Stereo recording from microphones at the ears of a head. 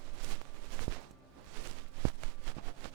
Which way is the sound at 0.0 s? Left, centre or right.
Right.